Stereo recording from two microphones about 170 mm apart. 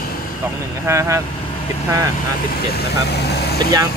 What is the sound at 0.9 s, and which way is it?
Speech, 15° right (ahead or behind).